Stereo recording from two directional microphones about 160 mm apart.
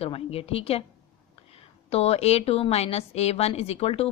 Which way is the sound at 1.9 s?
40° left (ahead or behind).